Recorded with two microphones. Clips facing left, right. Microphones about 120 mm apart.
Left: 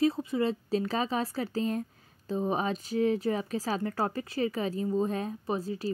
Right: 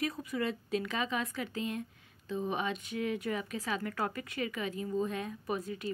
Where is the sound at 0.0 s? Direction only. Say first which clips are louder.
Left 7 dB; 30° left (ahead or behind).